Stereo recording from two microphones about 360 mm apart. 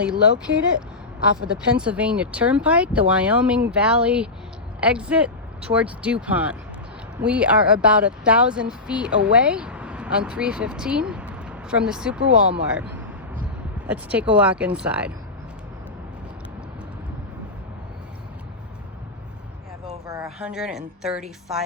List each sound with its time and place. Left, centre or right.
0.0 s speech: centre
19.9 s a woman's voice: centre